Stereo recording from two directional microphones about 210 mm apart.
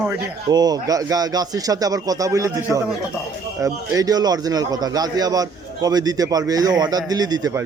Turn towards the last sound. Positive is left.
turn(degrees=-20)  # may be behind; listen again after turning